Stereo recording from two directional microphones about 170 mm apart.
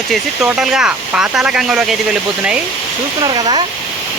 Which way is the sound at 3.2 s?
25° right (ahead or behind).